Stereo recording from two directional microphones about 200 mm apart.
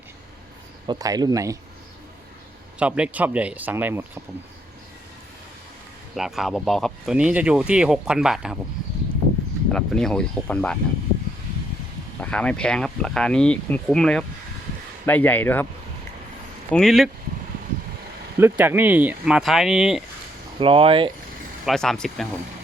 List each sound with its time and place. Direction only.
0.9 s speech: 20° right (ahead or behind)
2.7 s speech: 5° right (ahead or behind)
6.1 s speech: centre (ahead or behind)
9.7 s speech: 5° left (ahead or behind)
12.2 s speech: 5° left (ahead or behind)
16.7 s speech: centre (ahead or behind)
18.3 s speech: 10° right (ahead or behind)
20.6 s speech: 25° right (ahead or behind)
21.7 s speech: centre (ahead or behind)